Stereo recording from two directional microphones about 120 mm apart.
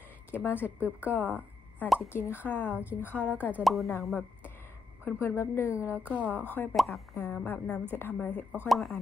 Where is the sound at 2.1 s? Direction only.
15° left (ahead or behind).